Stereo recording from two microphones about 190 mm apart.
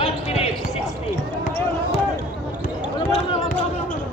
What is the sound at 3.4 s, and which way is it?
Basketball bounce, 45° left (ahead or behind).